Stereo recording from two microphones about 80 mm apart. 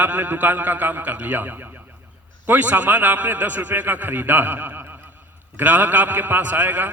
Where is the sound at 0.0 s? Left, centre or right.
Right.